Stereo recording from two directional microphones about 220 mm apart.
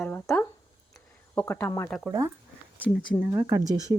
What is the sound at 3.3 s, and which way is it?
Speech, 15° right (ahead or behind).